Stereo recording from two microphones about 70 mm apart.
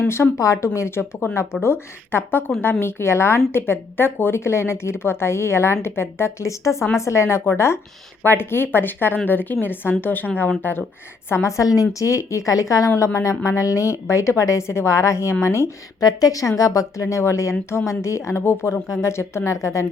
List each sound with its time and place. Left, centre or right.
0.1 s a woman's voice: left
0.4 s a woman's voice: left
11.3 s speech: left
16.0 s a woman's voice: left